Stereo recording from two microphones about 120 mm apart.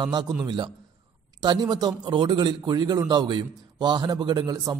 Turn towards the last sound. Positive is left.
turn(degrees=-35)  # may be behind; listen again after turning